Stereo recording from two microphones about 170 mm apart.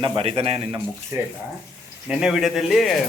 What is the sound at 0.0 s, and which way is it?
Speech, 30° right (ahead or behind).